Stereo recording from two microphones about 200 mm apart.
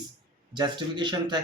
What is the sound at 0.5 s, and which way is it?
Speech, 20° right (ahead or behind).